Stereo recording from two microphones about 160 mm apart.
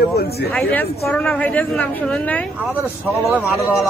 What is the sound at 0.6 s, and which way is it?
A woman's voice, 10° left (ahead or behind).